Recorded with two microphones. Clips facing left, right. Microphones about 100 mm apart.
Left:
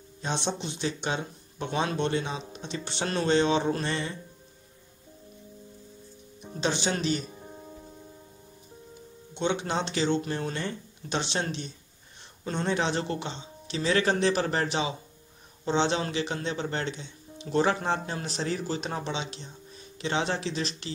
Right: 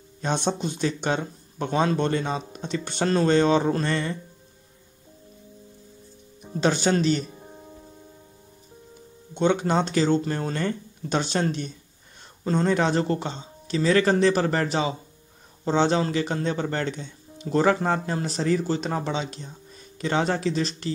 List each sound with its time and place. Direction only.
0.2 s speech: 50° right (ahead or behind)
6.6 s speech: 50° right (ahead or behind)
7.2 s music: centre (ahead or behind)
9.3 s speech: 45° right (ahead or behind)
12.4 s speech: 35° right (ahead or behind)